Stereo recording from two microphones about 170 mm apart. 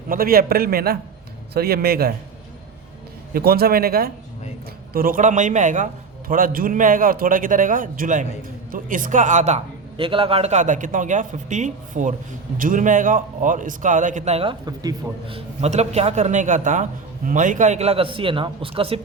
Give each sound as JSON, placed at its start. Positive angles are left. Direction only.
{"t": 0.1, "sound": "a man's voice", "side_deg": -60}
{"t": 3.3, "sound": "a man's voice", "side_deg": -65}
{"t": 10.0, "sound": "a man's voice", "side_deg": -30}
{"t": 14.8, "sound": "a man's voice", "side_deg": -20}
{"t": 15.4, "sound": "a man's voice", "side_deg": -40}